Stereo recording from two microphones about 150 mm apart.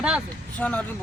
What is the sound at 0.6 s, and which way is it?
Speech, 10° left (ahead or behind).